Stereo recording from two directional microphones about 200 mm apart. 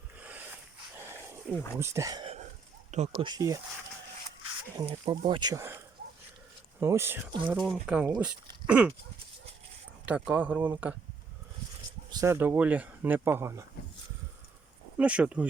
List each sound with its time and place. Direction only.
0.2 s a sound: 10° right (ahead or behind)
1.1 s wild animals: 10° right (ahead or behind)
1.7 s speech: 15° right (ahead or behind)
2.9 s speech: 35° right (ahead or behind)
3.2 s speech: 15° right (ahead or behind)
4.9 s speech: 25° right (ahead or behind)
7.5 s speech: centre (ahead or behind)
8.6 s livestock: 5° right (ahead or behind)
10.1 s speech: 5° right (ahead or behind)
12.1 s speech: 15° right (ahead or behind)
14.9 s speech: 5° right (ahead or behind)